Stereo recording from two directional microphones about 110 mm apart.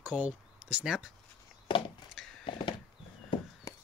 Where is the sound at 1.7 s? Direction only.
50° left (ahead or behind).